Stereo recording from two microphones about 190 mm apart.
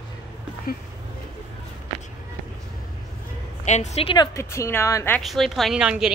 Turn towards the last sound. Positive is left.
turn(degrees=-5)  # may be behind; listen again after turning